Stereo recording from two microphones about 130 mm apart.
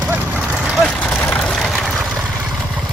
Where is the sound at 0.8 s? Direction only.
10° left (ahead or behind).